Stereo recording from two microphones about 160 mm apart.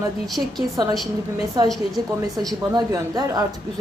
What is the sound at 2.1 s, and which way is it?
A woman's voice, 25° right (ahead or behind).